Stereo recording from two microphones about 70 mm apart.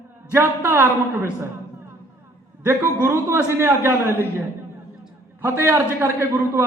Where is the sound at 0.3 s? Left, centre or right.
Right.